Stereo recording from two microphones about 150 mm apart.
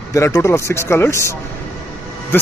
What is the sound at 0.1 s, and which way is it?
Speech, 20° left (ahead or behind).